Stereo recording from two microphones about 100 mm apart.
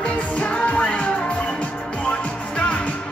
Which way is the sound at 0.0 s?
15° left (ahead or behind).